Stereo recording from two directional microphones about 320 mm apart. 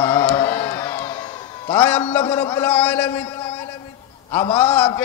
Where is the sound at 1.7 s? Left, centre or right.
Centre.